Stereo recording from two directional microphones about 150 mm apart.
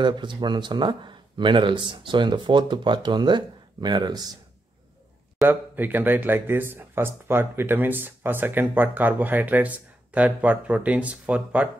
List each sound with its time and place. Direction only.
0.0 s speech: 30° right (ahead or behind)
5.4 s speech: 15° right (ahead or behind)